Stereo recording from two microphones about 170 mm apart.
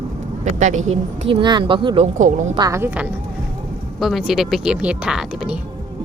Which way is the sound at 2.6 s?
20° right (ahead or behind).